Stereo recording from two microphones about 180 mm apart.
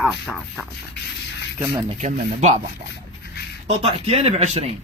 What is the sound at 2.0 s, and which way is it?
Speech, 40° right (ahead or behind).